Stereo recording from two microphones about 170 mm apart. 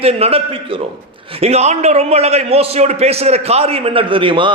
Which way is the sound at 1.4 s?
40° right (ahead or behind).